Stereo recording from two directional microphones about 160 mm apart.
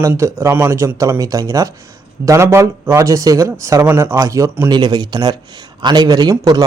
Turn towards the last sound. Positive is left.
turn(degrees=-25)  # may be behind; listen again after turning